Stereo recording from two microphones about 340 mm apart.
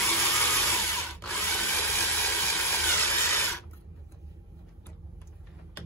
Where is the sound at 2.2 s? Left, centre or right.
Centre.